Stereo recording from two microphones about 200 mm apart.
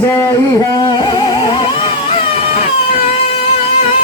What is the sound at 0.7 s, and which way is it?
Music, 20° left (ahead or behind).